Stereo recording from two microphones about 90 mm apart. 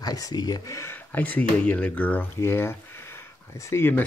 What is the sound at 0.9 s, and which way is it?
Speech, 20° left (ahead or behind).